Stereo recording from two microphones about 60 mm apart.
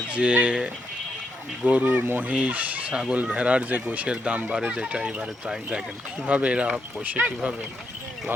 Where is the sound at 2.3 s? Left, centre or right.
Right.